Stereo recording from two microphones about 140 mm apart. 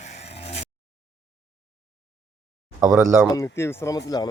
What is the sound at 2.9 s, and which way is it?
Speech, 20° right (ahead or behind).